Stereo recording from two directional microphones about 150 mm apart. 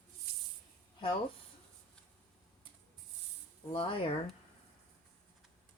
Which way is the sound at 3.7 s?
35° left (ahead or behind).